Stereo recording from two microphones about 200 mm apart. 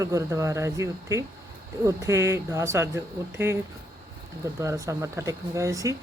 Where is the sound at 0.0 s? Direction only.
15° right (ahead or behind).